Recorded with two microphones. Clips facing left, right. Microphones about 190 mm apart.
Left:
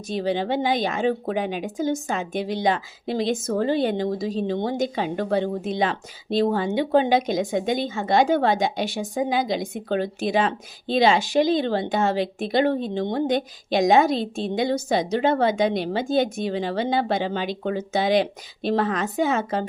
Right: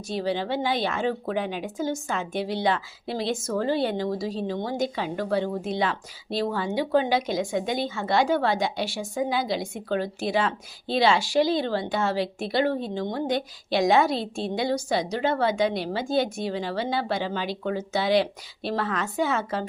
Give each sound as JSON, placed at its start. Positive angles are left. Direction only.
{"t": 0.1, "sound": "a woman's voice", "side_deg": 20}